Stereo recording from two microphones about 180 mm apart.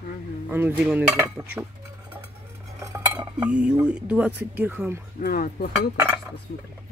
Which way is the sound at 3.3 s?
5° right (ahead or behind).